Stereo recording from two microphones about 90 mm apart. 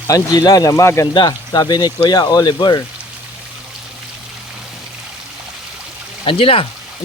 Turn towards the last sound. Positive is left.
turn(degrees=90)